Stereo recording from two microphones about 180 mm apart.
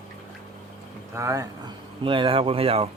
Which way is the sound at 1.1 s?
15° right (ahead or behind).